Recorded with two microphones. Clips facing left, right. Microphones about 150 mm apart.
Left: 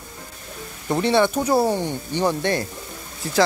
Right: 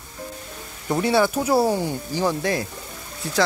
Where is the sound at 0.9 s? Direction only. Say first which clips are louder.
Left 1 dB; 5° right (ahead or behind).